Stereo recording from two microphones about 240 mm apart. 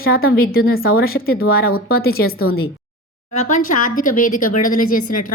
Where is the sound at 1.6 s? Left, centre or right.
Left.